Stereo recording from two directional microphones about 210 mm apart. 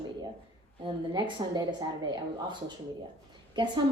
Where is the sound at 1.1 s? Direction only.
20° right (ahead or behind).